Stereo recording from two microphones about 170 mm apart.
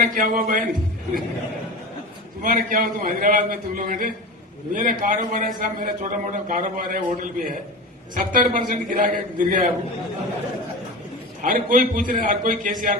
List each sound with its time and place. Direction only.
0.0 s a man's voice: 50° right (ahead or behind)
2.4 s a man's voice: 55° right (ahead or behind)
11.4 s a man's voice: 55° right (ahead or behind)